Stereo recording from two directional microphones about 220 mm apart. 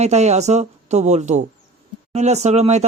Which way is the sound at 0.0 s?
30° right (ahead or behind).